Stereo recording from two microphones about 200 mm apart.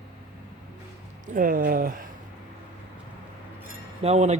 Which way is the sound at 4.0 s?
35° right (ahead or behind).